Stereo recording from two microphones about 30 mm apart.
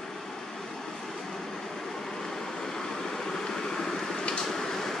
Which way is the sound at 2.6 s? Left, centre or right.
Centre.